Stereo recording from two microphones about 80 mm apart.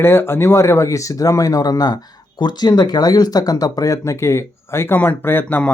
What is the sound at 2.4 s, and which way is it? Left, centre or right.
A man's voice, left.